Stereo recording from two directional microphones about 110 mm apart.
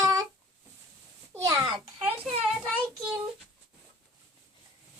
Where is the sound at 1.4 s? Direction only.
30° right (ahead or behind).